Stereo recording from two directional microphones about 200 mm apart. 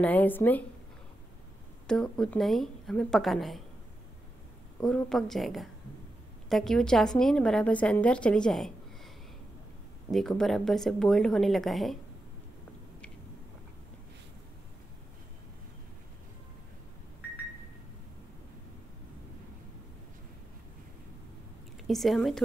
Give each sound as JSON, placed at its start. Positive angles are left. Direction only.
{"t": 0.0, "sound": "a woman's voice", "side_deg": 10}
{"t": 1.9, "sound": "a woman's voice", "side_deg": 5}
{"t": 4.7, "sound": "a woman's voice", "side_deg": 5}
{"t": 10.1, "sound": "a woman's voice", "side_deg": 0}
{"t": 21.8, "sound": "a woman's voice", "side_deg": 0}